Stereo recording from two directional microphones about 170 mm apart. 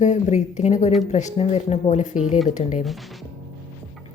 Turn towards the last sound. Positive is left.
turn(degrees=0)  # may be behind; listen again after turning